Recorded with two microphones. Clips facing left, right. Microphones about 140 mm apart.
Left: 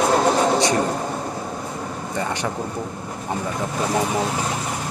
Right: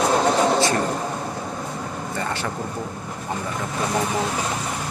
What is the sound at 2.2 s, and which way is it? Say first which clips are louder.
Speech: left 3 dB; 15° left (ahead or behind).